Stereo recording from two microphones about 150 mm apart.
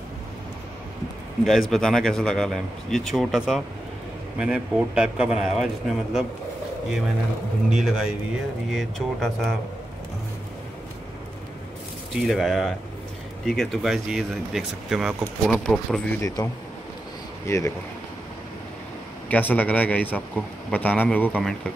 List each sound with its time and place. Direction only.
1.4 s speech: centre (ahead or behind)
7.7 s speech: 5° right (ahead or behind)
12.1 s speech: centre (ahead or behind)
16.2 s a man's voice: 20° left (ahead or behind)
17.5 s a man's voice: 20° left (ahead or behind)
19.2 s a man's voice: 10° left (ahead or behind)